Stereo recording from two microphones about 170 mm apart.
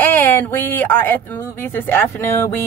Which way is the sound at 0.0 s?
10° left (ahead or behind).